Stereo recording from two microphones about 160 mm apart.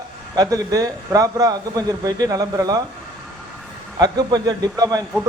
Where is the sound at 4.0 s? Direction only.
25° right (ahead or behind).